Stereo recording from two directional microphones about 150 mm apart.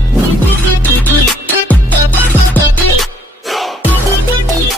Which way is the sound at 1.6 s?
10° left (ahead or behind).